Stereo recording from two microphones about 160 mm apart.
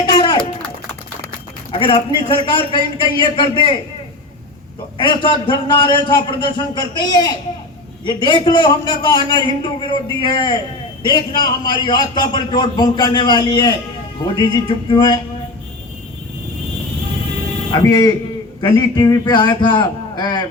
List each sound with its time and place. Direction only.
0.1 s a sound: 30° left (ahead or behind)
1.7 s a man's voice: 30° left (ahead or behind)
4.9 s a man's voice: 30° left (ahead or behind)
17.7 s a man's voice: 25° left (ahead or behind)